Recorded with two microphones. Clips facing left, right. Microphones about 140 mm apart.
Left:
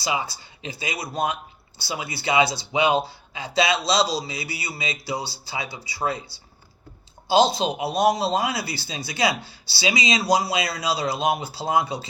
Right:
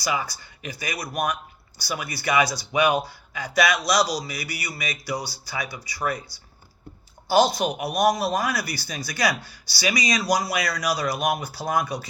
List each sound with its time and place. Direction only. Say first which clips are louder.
0.0 s a man's voice: even; 25° left (ahead or behind)
7.3 s a man's voice: left 1 dB; 25° left (ahead or behind)